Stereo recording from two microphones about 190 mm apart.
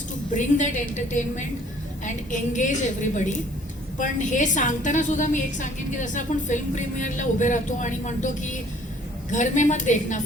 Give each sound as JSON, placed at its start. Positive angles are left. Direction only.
{"t": 0.3, "sound": "a woman's voice", "side_deg": 40}